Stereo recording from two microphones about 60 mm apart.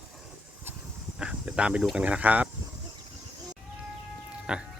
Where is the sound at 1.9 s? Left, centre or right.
Right.